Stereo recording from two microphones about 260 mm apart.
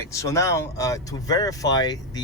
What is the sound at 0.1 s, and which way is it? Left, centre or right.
Speech, centre.